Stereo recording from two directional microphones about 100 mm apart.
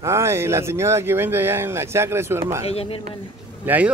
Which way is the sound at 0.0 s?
30° right (ahead or behind).